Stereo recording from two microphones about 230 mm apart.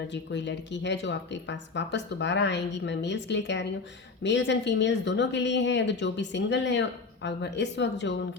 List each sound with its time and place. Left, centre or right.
0.1 s speech: left